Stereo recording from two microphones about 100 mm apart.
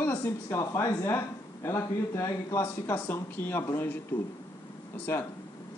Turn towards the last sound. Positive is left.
turn(degrees=20)  # may be behind; listen again after turning